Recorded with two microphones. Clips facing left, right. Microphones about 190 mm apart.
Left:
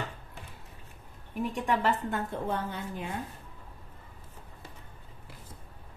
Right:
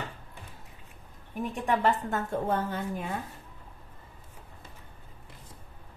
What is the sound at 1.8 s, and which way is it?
A woman's voice, 45° right (ahead or behind).